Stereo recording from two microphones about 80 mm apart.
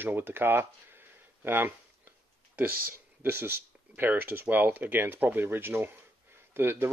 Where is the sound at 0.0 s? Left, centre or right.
Right.